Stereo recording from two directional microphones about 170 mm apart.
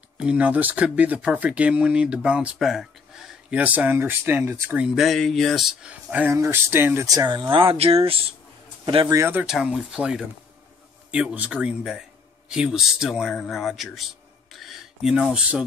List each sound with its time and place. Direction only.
0.2 s speech: 5° right (ahead or behind)
7.5 s speech: 35° right (ahead or behind)
9.2 s a man's voice: 10° right (ahead or behind)
14.5 s a sound: centre (ahead or behind)